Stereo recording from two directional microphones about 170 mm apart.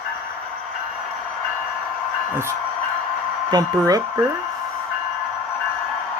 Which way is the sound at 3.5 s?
20° right (ahead or behind).